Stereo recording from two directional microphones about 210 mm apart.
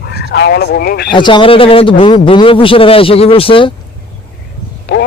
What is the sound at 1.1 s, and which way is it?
A man's voice, 20° left (ahead or behind).